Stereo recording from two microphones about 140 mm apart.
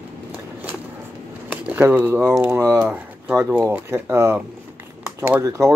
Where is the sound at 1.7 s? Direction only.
15° right (ahead or behind).